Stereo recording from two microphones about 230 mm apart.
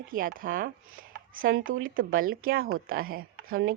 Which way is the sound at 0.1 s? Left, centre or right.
Right.